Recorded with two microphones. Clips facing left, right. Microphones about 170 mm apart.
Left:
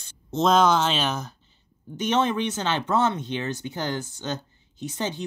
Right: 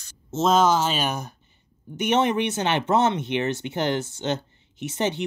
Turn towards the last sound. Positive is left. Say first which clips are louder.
# right 4 dB
turn(degrees=-20)  # may be behind; listen again after turning